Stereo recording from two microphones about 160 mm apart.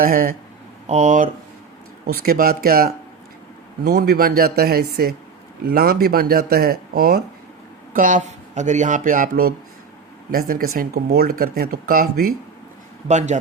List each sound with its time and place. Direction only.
0.0 s speech: 60° right (ahead or behind)
0.9 s speech: 50° right (ahead or behind)
2.2 s speech: 65° right (ahead or behind)
3.8 s speech: 85° right
7.9 s speech: 55° right (ahead or behind)
13.1 s speech: 45° right (ahead or behind)